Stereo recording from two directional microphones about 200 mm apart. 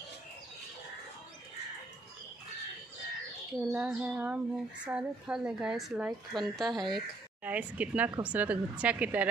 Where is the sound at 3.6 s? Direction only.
5° right (ahead or behind).